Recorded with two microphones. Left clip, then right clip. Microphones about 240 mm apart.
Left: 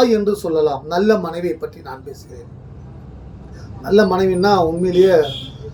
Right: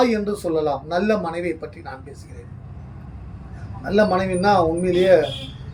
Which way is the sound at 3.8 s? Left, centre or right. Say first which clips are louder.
Left 5 dB; centre.